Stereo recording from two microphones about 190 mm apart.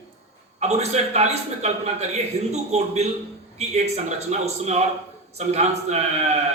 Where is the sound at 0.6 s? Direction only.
35° right (ahead or behind).